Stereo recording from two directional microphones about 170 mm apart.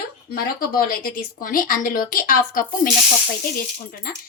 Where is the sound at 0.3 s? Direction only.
60° left (ahead or behind).